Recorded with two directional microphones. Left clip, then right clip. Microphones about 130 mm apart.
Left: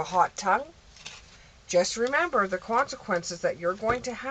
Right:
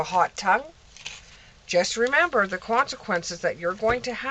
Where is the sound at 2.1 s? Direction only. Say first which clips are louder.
Right 4 dB; 35° right (ahead or behind).